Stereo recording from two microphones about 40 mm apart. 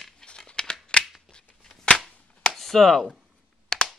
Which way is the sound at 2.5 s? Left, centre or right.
Centre.